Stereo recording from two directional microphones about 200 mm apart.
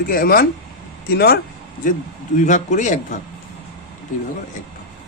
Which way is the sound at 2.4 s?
40° left (ahead or behind).